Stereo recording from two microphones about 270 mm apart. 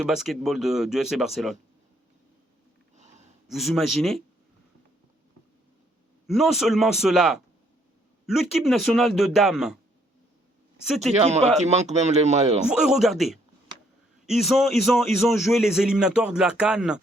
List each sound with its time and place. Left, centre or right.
0.0 s a man's voice: centre
3.4 s a man's voice: centre
6.2 s a man's voice: centre
11.0 s speech: right
12.6 s a man's voice: centre